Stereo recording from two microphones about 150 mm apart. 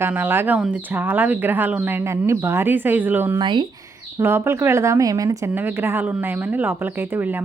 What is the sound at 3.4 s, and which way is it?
Speech, 30° right (ahead or behind).